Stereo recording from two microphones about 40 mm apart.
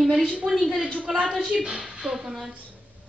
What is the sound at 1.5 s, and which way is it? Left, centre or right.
Speech, centre.